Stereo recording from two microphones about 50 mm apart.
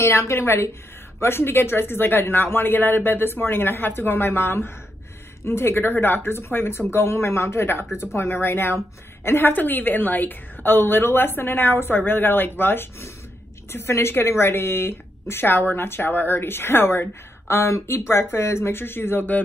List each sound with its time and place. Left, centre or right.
0.0 s a woman's voice: left
0.4 s a woman's voice: left